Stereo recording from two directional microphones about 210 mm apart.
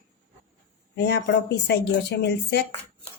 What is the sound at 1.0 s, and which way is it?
A woman's voice, 55° left (ahead or behind).